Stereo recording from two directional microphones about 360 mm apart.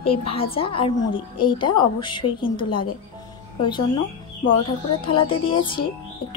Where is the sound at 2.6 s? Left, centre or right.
Left.